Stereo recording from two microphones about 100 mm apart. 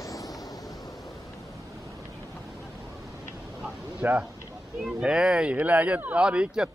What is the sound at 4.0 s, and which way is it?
Speech, 15° right (ahead or behind).